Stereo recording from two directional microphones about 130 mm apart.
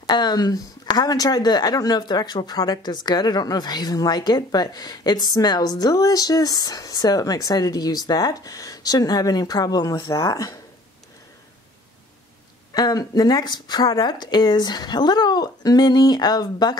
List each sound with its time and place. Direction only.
0.0 s speech: 30° left (ahead or behind)
12.7 s speech: 30° left (ahead or behind)